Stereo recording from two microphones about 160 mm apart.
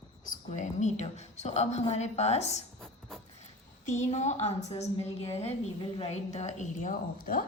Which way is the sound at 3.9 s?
45° left (ahead or behind).